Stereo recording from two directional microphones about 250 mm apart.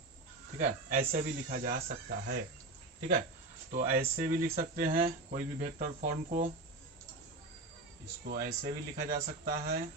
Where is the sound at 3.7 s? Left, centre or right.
Right.